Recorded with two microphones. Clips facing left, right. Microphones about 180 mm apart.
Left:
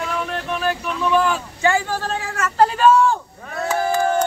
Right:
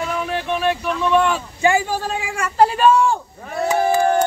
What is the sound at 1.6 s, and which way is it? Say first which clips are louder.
Speech: right 3 dB; 15° right (ahead or behind).